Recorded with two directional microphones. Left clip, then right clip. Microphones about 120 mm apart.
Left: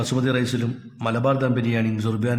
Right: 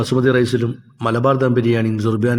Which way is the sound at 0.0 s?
30° right (ahead or behind).